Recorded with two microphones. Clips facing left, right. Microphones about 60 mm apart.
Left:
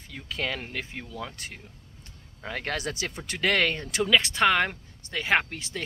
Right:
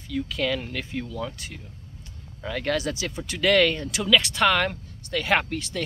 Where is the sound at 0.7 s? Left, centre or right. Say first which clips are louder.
Right 4 dB; centre.